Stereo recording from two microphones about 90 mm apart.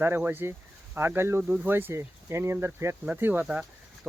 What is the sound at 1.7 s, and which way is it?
Speech, 25° right (ahead or behind).